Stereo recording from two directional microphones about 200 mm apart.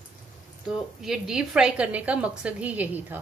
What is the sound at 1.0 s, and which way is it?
A woman's voice, centre (ahead or behind).